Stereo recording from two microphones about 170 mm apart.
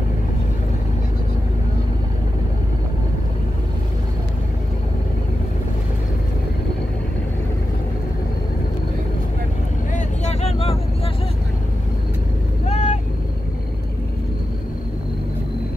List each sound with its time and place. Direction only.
9.9 s vehicle: 40° left (ahead or behind)
12.6 s vehicle: 40° left (ahead or behind)